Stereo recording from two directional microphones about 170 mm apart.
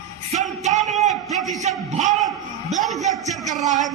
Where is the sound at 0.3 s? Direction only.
45° right (ahead or behind).